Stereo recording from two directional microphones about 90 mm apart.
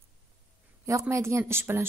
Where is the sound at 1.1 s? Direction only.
30° right (ahead or behind).